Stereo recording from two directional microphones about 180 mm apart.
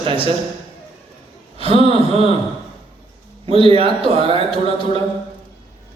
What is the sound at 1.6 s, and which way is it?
Speech, 30° right (ahead or behind).